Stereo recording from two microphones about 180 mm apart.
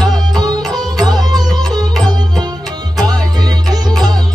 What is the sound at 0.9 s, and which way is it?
Music, 20° right (ahead or behind).